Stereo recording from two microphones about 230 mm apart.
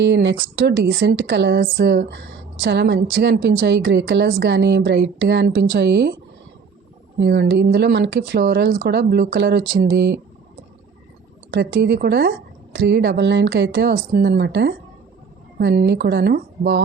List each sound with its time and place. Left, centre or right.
0.0 s speech: right
7.2 s speech: right
11.5 s speech: right